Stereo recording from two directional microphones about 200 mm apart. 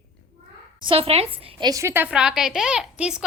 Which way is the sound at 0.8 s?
30° right (ahead or behind).